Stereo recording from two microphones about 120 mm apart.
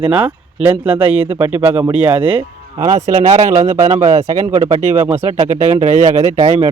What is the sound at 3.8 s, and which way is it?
Speech, 65° right (ahead or behind).